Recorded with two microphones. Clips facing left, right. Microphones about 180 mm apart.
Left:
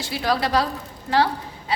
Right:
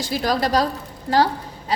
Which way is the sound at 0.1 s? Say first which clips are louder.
Right 1 dB; 40° right (ahead or behind).